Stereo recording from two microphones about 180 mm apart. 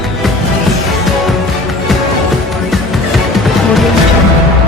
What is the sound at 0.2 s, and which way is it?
Music, centre (ahead or behind).